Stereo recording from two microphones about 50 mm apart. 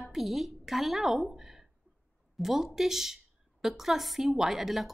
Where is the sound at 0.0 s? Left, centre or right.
Centre.